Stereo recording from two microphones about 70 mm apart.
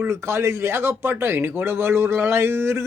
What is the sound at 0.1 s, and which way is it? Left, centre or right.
A man's voice, right.